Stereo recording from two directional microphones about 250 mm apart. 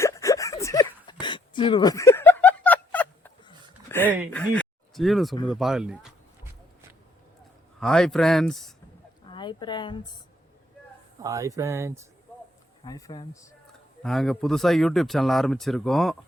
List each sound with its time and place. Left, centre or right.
0.0 s a sound: centre
4.3 s speech: centre
5.5 s a sound: centre
7.8 s speech: centre
9.3 s a woman's voice: centre
11.2 s speech: centre
12.8 s speech: centre
14.0 s speech: centre